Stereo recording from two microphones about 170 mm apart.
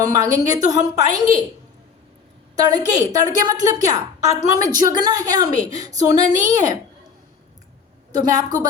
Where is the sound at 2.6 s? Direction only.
25° right (ahead or behind).